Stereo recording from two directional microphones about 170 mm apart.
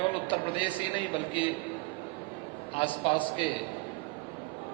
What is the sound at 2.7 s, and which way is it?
Speech, 30° left (ahead or behind).